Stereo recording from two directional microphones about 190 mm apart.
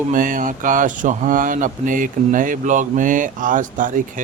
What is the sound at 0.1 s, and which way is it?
A man's voice, 45° right (ahead or behind).